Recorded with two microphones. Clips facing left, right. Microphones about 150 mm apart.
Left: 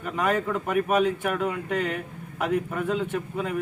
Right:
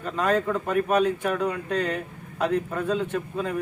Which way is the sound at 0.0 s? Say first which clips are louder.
Right 2 dB; 15° left (ahead or behind).